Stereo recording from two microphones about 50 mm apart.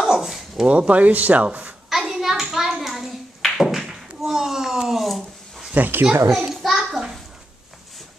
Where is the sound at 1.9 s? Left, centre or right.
Centre.